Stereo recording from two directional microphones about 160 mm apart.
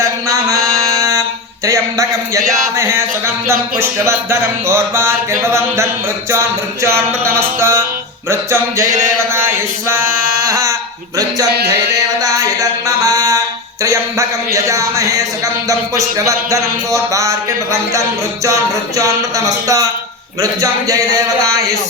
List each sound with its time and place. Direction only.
0.0 s mantra: 20° right (ahead or behind)
1.6 s speech: 20° right (ahead or behind)
10.4 s a sound: 20° right (ahead or behind)
11.5 s music: 90° right
12.2 s a sound: 20° right (ahead or behind)
13.8 s speech: 20° right (ahead or behind)